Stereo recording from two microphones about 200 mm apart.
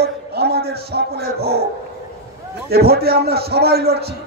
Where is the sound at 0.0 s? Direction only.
50° right (ahead or behind).